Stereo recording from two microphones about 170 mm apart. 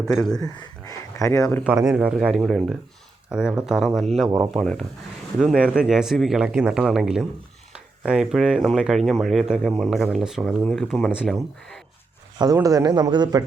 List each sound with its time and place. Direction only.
0.0 s speech: 5° left (ahead or behind)
0.3 s speech: 20° left (ahead or behind)
1.6 s speech: 5° right (ahead or behind)
12.5 s a man's voice: 20° right (ahead or behind)